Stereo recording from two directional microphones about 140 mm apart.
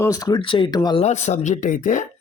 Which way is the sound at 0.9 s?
55° left (ahead or behind).